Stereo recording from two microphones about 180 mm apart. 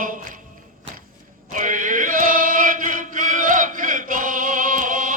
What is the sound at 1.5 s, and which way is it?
Chant, 45° right (ahead or behind).